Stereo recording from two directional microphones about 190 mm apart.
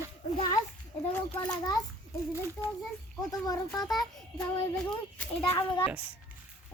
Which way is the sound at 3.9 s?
Centre (ahead or behind).